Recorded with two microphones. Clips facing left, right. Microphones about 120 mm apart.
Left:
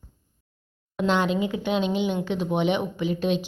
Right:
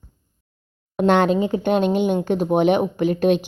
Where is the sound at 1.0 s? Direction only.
50° right (ahead or behind).